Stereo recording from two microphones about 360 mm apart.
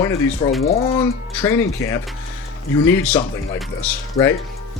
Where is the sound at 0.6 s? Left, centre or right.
Centre.